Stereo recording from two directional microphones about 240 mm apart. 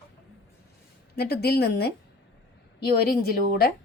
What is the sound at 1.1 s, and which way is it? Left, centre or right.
Speech, left.